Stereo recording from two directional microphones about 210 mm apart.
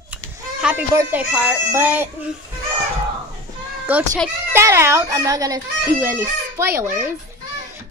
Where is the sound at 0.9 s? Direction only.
10° right (ahead or behind).